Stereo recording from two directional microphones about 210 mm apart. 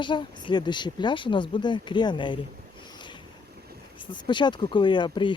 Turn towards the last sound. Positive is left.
turn(degrees=20)  # may be behind; listen again after turning